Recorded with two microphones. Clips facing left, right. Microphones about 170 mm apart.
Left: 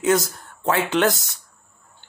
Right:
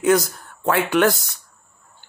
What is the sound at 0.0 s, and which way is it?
Speech, 25° left (ahead or behind).